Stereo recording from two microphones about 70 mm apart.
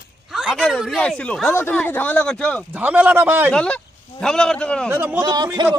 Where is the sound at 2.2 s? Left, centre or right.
Centre.